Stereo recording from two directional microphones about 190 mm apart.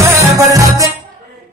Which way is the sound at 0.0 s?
15° right (ahead or behind).